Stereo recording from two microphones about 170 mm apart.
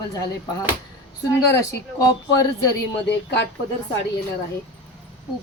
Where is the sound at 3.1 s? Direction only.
90° left.